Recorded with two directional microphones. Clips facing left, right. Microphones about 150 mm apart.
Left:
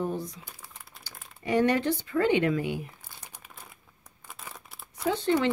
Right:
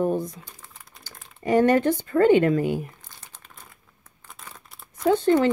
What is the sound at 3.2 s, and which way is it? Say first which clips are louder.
Crumpling: even; 10° left (ahead or behind).